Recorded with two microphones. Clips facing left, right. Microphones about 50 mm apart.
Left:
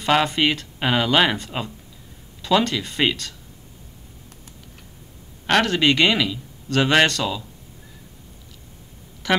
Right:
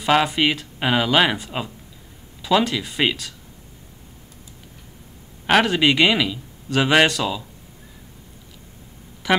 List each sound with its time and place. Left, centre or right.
0.0 s speech: centre
5.5 s speech: centre
9.2 s a woman's voice: centre